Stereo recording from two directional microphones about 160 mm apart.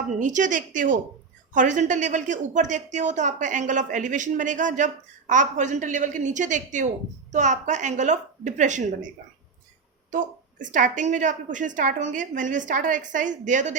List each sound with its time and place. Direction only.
0.2 s a woman's voice: 50° right (ahead or behind)